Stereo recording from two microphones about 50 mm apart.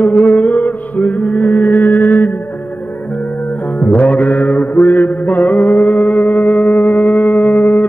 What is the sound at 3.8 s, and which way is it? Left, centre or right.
Mantra, left.